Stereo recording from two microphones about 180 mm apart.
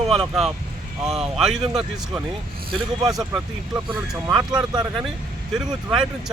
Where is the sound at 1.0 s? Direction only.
5° right (ahead or behind).